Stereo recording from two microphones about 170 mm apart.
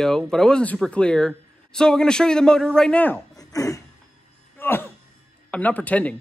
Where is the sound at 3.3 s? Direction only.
20° left (ahead or behind).